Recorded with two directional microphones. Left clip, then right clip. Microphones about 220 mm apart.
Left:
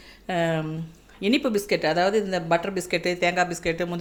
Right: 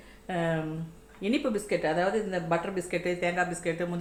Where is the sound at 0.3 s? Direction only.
55° left (ahead or behind).